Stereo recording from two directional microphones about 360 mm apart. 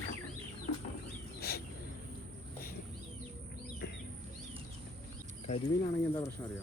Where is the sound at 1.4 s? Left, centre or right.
Left.